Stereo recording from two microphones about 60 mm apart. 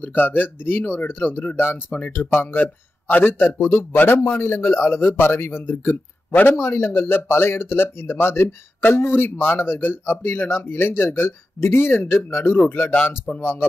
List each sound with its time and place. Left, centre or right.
0.0 s a man's voice: left
3.3 s a man's voice: left
12.5 s a man's voice: left